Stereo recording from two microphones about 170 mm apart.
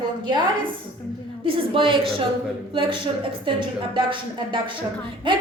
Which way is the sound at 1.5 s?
30° right (ahead or behind).